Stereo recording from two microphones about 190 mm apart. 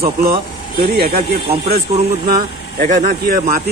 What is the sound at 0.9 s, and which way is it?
Speech, 55° right (ahead or behind).